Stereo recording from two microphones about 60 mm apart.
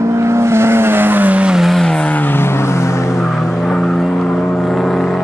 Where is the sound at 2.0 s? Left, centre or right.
Left.